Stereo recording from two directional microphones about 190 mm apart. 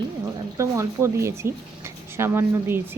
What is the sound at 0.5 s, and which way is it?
Speech, 15° right (ahead or behind).